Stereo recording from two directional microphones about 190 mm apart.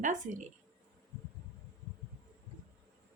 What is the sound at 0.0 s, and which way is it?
Speech, 40° right (ahead or behind).